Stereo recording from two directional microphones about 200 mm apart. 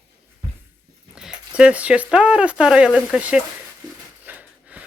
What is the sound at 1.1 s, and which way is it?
Speech, 5° right (ahead or behind).